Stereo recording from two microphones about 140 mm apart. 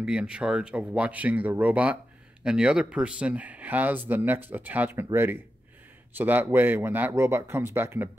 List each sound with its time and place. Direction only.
0.0 s speech: 5° right (ahead or behind)